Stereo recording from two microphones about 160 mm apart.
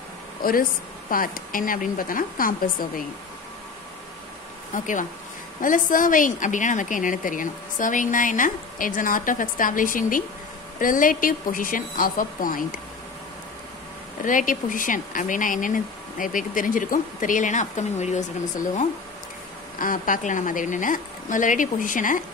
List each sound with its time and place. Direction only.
0.4 s a woman's voice: 65° left (ahead or behind)
4.7 s a woman's voice: 50° left (ahead or behind)
14.2 s a woman's voice: 55° left (ahead or behind)